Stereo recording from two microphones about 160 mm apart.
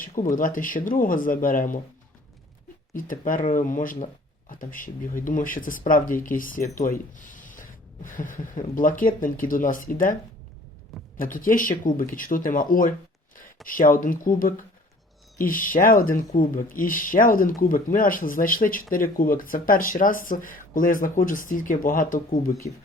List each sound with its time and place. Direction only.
0.0 s speech: 60° left (ahead or behind)
2.9 s speech: 60° left (ahead or behind)
11.2 s speech: 60° left (ahead or behind)